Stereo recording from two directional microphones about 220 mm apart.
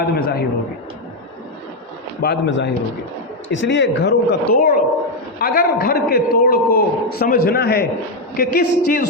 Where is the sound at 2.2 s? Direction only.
50° left (ahead or behind).